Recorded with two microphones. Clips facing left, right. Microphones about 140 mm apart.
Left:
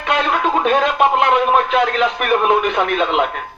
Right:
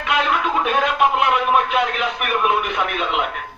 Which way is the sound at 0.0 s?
35° left (ahead or behind).